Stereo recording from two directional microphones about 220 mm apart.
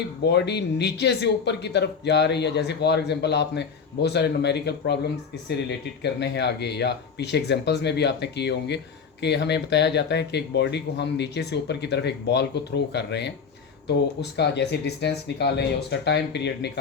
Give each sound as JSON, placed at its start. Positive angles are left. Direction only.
{"t": 0.3, "sound": "speech", "side_deg": 50}